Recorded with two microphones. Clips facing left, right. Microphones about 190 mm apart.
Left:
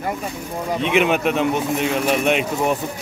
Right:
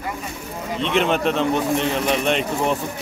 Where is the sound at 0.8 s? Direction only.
10° left (ahead or behind).